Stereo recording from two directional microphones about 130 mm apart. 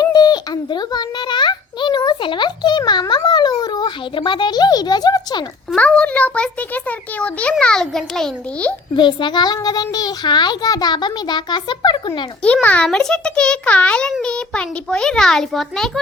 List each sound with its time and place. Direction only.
0.0 s a sound: 30° left (ahead or behind)
3.2 s speech: 35° left (ahead or behind)
5.7 s a child's voice: 10° left (ahead or behind)
9.0 s a child's voice: 35° left (ahead or behind)
12.6 s a child's voice: 10° left (ahead or behind)